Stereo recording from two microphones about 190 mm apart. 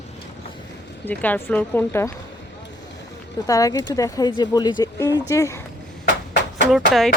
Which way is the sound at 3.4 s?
20° left (ahead or behind).